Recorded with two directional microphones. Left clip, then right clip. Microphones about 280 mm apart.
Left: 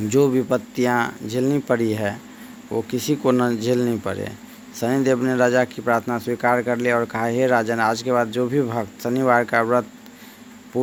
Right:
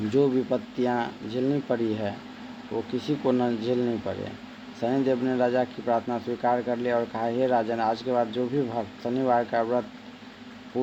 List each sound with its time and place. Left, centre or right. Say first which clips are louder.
0.1 s a man's voice: left 6 dB; left